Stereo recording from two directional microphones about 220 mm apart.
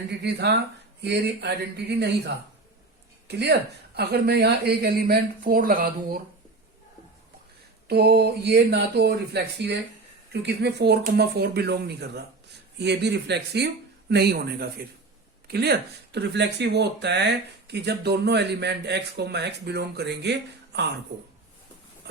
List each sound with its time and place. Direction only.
0.1 s speech: 50° right (ahead or behind)
7.9 s speech: 45° right (ahead or behind)